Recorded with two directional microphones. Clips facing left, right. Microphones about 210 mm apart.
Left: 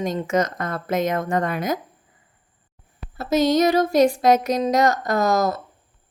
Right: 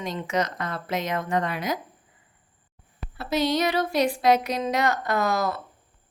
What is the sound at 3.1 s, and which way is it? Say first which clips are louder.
A woman's voice: left 6 dB; 45° left (ahead or behind).